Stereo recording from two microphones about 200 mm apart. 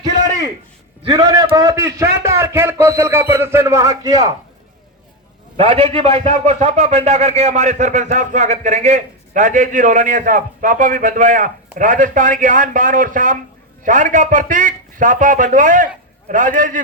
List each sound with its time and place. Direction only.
1.1 s a man's voice: 20° right (ahead or behind)
5.5 s a man's voice: 30° right (ahead or behind)